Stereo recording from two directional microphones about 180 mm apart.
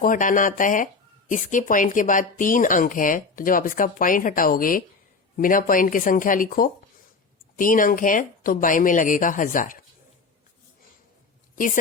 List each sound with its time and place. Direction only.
0.0 s speech: 50° left (ahead or behind)
11.5 s a woman's voice: 50° left (ahead or behind)